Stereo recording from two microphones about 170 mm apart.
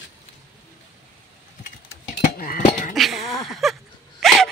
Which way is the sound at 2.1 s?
55° left (ahead or behind).